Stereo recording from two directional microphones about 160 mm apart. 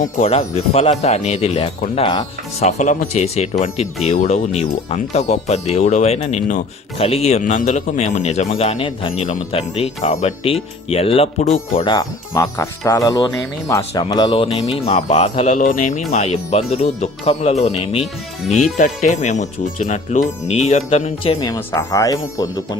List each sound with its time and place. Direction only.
0.0 s speech: 40° left (ahead or behind)
2.6 s speech: 50° left (ahead or behind)
11.8 s speech: 25° left (ahead or behind)
18.0 s speech: centre (ahead or behind)
18.8 s speech: 50° left (ahead or behind)
21.4 s speech: 20° left (ahead or behind)